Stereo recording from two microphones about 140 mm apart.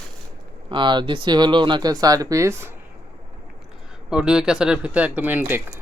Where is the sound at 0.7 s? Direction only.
35° right (ahead or behind).